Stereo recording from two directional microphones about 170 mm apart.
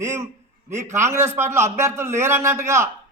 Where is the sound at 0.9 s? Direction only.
15° right (ahead or behind).